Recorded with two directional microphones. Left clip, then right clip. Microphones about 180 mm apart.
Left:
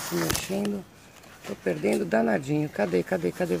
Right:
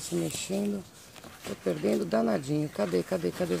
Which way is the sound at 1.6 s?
15° right (ahead or behind).